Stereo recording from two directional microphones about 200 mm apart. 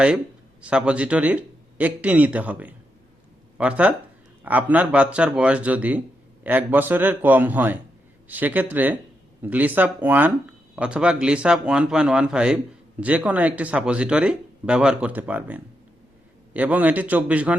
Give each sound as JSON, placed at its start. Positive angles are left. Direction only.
{"t": 0.6, "sound": "a man's voice", "side_deg": -5}